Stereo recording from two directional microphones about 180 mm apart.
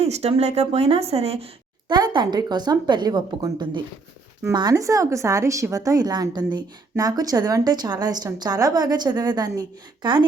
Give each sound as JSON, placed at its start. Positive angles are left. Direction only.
{"t": 0.0, "sound": "speech", "side_deg": -35}
{"t": 1.9, "sound": "speech", "side_deg": -25}